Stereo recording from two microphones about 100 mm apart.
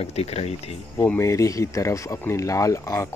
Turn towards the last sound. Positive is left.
turn(degrees=30)  # may be behind; listen again after turning